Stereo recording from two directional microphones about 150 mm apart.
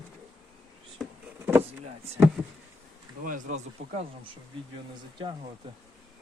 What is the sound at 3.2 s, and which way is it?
Speech, 55° right (ahead or behind).